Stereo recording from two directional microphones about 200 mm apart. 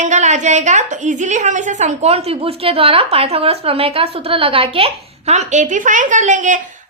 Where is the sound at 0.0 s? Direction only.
35° right (ahead or behind).